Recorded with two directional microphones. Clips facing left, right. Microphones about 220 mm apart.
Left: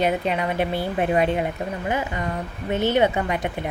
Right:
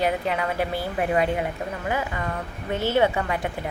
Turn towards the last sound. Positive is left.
turn(degrees=20)  # may be behind; listen again after turning